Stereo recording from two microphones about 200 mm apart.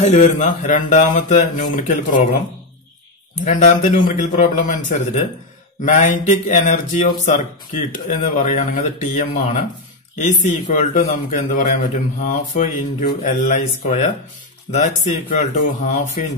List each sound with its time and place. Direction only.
0.0 s speech: 35° left (ahead or behind)
3.4 s speech: 40° left (ahead or behind)